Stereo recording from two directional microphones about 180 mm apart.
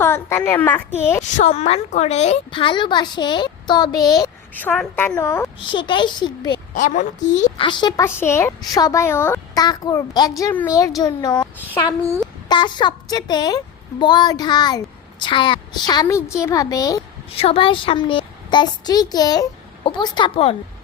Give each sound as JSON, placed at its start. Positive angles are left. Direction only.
{"t": 0.0, "sound": "speech", "side_deg": 15}
{"t": 1.2, "sound": "a woman's voice", "side_deg": 40}
{"t": 4.5, "sound": "a woman's voice", "side_deg": 10}
{"t": 6.7, "sound": "a woman's voice", "side_deg": 45}
{"t": 7.6, "sound": "speech", "side_deg": 25}
{"t": 12.5, "sound": "a woman's voice", "side_deg": 25}
{"t": 17.2, "sound": "a woman's voice", "side_deg": 30}